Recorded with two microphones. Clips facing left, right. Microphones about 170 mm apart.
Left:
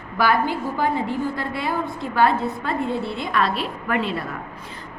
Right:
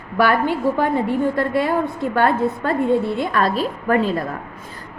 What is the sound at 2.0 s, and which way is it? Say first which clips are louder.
A woman's voice: even; 55° right (ahead or behind).